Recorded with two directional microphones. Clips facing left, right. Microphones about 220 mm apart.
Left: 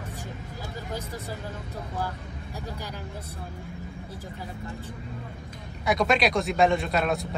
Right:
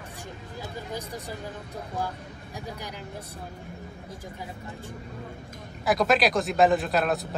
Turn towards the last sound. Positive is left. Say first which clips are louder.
# right 1 dB
turn(degrees=0)  # may be behind; listen again after turning